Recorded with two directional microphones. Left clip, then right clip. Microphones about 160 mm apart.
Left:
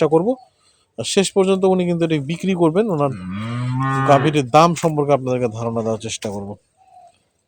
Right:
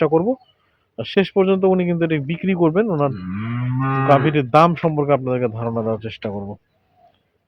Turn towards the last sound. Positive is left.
turn(degrees=15)  # may be behind; listen again after turning